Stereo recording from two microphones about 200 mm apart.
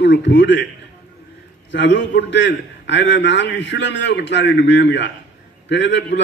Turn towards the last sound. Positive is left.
turn(degrees=60)  # may be behind; listen again after turning